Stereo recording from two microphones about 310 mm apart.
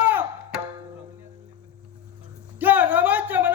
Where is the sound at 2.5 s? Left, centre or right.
Centre.